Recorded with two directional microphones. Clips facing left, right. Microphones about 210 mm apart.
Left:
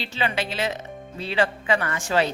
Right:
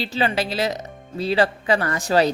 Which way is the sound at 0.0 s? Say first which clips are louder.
Right 4 dB; 35° right (ahead or behind).